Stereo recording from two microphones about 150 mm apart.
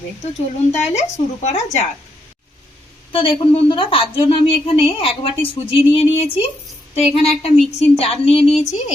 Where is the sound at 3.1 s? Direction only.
35° left (ahead or behind).